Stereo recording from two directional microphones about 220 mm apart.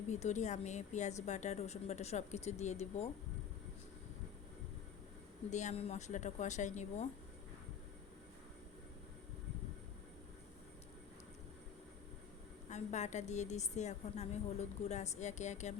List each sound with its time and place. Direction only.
0.1 s a woman's voice: 30° left (ahead or behind)
5.5 s a woman's voice: 30° left (ahead or behind)
12.7 s a woman's voice: 30° left (ahead or behind)